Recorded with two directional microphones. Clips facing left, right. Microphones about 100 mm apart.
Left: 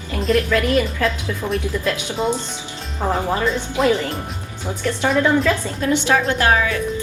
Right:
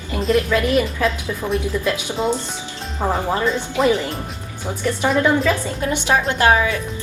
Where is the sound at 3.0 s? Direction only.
15° right (ahead or behind).